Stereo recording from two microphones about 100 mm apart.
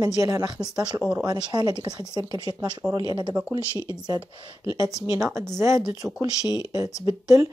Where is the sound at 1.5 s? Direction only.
35° right (ahead or behind).